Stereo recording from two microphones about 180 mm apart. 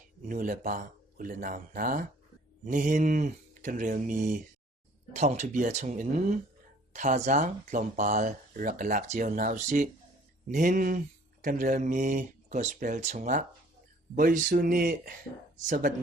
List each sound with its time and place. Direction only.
0.2 s speech: 45° right (ahead or behind)